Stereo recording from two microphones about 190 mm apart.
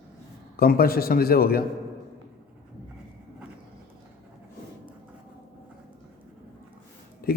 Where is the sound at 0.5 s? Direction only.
50° left (ahead or behind).